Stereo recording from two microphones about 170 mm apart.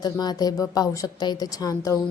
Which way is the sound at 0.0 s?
25° left (ahead or behind).